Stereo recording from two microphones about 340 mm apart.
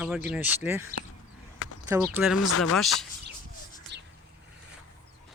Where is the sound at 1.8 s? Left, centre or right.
Centre.